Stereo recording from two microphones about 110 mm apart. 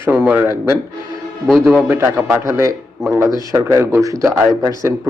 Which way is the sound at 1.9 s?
20° right (ahead or behind).